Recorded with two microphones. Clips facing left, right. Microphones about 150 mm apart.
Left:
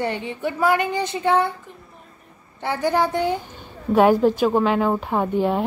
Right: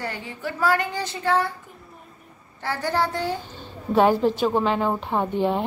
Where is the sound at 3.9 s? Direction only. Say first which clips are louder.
Left 3 dB; 5° left (ahead or behind).